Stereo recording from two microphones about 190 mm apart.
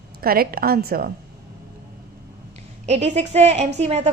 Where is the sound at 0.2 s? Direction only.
50° right (ahead or behind).